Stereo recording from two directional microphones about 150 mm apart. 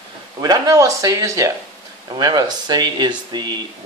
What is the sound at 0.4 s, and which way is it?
Speech, 25° right (ahead or behind).